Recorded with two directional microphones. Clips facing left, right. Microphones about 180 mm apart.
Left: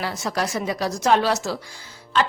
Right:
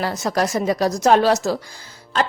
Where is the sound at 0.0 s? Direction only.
40° right (ahead or behind).